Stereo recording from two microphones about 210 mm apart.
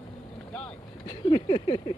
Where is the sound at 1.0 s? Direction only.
25° left (ahead or behind).